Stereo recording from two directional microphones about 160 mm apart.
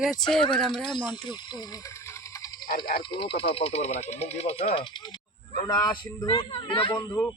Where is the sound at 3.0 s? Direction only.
30° left (ahead or behind).